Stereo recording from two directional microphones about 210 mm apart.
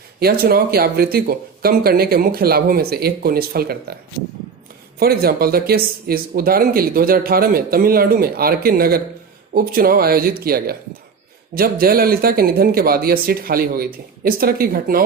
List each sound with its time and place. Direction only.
0.2 s speech: 45° right (ahead or behind)
4.9 s speech: 45° right (ahead or behind)